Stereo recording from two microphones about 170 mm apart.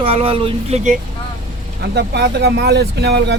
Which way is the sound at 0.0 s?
35° right (ahead or behind).